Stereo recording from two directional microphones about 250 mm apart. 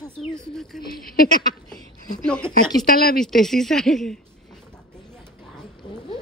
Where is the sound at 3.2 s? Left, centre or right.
Centre.